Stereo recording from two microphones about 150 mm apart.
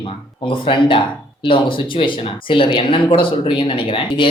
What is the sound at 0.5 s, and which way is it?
Speech, 35° left (ahead or behind).